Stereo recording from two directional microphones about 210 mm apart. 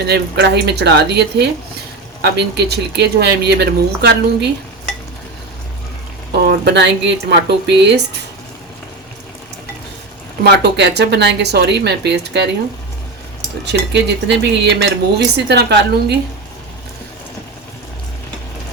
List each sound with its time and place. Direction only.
0.0 s speech: 50° right (ahead or behind)
6.3 s speech: 50° right (ahead or behind)
10.4 s speech: 50° right (ahead or behind)
13.7 s speech: 55° right (ahead or behind)